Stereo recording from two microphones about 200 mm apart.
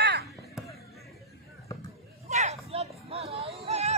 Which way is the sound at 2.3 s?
35° right (ahead or behind).